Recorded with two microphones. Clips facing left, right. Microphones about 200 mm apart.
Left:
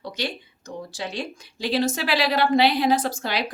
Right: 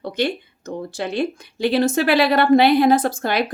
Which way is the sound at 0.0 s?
55° right (ahead or behind).